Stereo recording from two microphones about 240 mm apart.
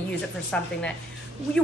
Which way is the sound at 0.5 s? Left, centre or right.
Centre.